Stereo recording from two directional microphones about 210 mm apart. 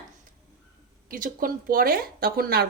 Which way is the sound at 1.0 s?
40° right (ahead or behind).